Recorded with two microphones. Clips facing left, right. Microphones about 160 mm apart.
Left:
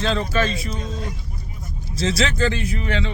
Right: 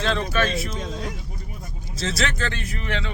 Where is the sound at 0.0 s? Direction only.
Centre (ahead or behind).